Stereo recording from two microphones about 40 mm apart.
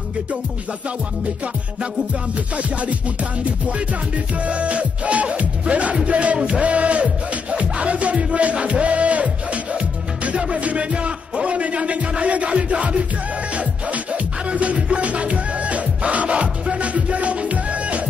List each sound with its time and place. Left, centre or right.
2.5 s music: right
4.4 s music: right